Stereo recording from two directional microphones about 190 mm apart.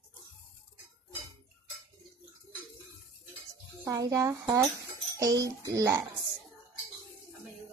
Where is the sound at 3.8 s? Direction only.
15° right (ahead or behind).